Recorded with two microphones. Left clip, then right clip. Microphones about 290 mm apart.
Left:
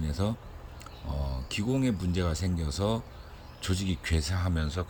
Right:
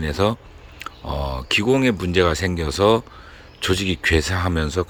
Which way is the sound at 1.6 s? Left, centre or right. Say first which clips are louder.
Right 10 dB; right.